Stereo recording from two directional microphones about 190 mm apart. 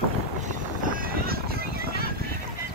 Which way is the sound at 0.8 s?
50° right (ahead or behind).